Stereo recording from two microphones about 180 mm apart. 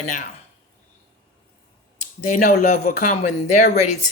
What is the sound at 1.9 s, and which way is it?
Speech, 45° left (ahead or behind).